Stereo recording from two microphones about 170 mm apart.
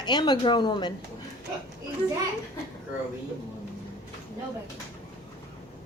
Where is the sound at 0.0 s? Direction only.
25° left (ahead or behind).